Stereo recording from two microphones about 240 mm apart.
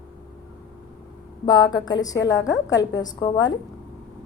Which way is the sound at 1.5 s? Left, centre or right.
Centre.